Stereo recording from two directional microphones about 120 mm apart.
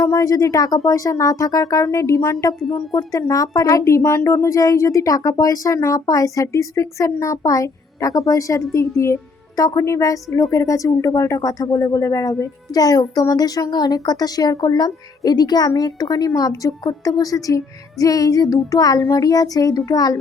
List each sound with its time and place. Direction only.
0.0 s speech: 30° left (ahead or behind)
2.6 s a woman's voice: 40° left (ahead or behind)
3.1 s a woman's voice: 25° left (ahead or behind)